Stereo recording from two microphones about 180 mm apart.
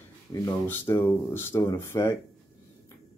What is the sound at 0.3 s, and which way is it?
Speech, 15° left (ahead or behind).